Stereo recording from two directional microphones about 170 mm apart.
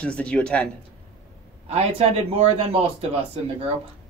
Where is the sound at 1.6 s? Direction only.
40° right (ahead or behind).